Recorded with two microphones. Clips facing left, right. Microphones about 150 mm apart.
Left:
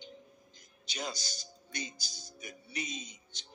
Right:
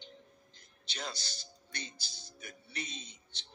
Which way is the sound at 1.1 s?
30° right (ahead or behind).